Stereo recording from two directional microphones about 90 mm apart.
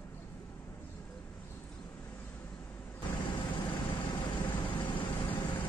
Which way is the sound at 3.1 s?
55° left (ahead or behind).